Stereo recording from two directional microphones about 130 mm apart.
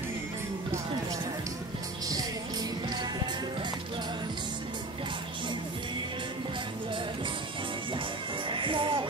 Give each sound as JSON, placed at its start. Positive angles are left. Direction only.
{"t": 8.5, "sound": "music", "side_deg": -40}